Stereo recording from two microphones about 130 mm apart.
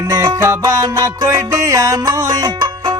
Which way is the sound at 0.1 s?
25° right (ahead or behind).